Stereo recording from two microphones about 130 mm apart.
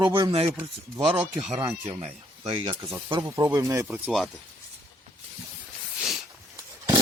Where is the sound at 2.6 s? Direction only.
35° right (ahead or behind); by 4.1 s 15° right (ahead or behind).